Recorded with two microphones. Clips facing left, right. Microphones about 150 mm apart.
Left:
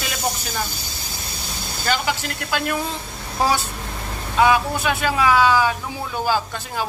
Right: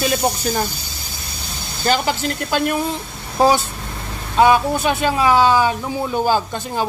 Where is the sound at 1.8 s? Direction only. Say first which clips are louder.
Right 5 dB; 35° right (ahead or behind).